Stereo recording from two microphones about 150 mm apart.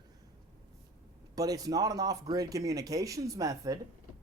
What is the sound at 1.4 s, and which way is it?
Speech, 25° right (ahead or behind).